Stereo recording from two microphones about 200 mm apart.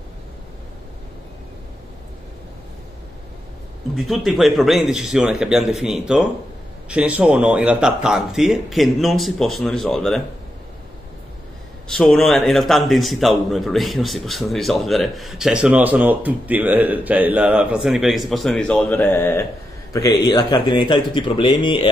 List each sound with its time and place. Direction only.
3.9 s a man's voice: centre (ahead or behind)
11.9 s a man's voice: centre (ahead or behind); by 21.8 s 25° left (ahead or behind)